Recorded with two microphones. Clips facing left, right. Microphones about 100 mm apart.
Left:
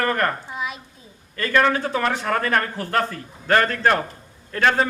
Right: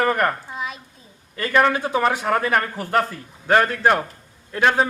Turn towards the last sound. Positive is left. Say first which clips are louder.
# right 1 dB
turn(degrees=-15)  # may be behind; listen again after turning